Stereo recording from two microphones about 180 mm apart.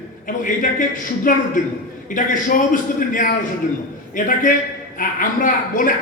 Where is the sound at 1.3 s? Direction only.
50° left (ahead or behind).